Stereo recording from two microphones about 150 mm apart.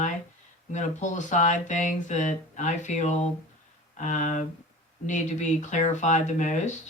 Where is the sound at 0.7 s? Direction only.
55° left (ahead or behind).